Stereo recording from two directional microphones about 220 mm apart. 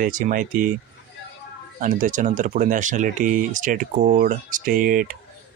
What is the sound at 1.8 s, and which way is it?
Speech, 35° right (ahead or behind).